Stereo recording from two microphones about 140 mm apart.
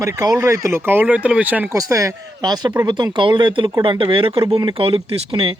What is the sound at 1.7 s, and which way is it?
Speech, 25° right (ahead or behind).